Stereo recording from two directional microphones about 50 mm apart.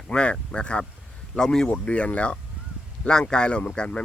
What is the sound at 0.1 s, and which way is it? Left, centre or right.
Speech, centre.